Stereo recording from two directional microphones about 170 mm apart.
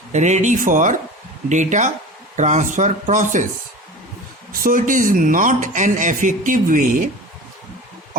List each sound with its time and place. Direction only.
0.1 s a man's voice: 45° right (ahead or behind)
4.6 s a man's voice: 50° right (ahead or behind)